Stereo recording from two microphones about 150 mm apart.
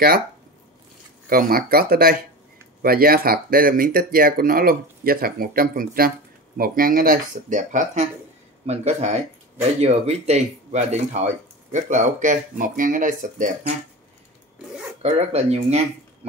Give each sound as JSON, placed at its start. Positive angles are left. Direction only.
{"t": 1.3, "sound": "speech", "side_deg": -75}
{"t": 2.8, "sound": "speech", "side_deg": -80}
{"t": 15.0, "sound": "speech", "side_deg": -45}